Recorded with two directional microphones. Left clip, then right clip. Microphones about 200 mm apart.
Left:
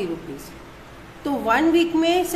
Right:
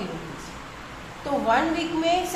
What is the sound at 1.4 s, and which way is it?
Speech, 40° left (ahead or behind).